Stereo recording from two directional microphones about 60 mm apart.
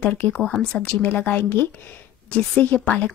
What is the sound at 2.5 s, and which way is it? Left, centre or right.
Speech, left.